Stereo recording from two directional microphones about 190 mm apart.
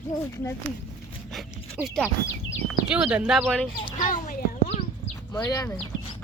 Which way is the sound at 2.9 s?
5° right (ahead or behind).